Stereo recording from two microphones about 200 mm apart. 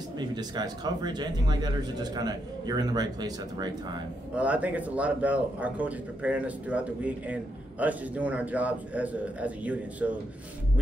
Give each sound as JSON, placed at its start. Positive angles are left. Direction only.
{"t": 0.2, "sound": "speech", "side_deg": -20}
{"t": 4.4, "sound": "speech", "side_deg": -5}